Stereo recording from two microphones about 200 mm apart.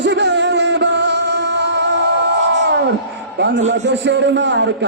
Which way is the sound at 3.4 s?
60° right (ahead or behind).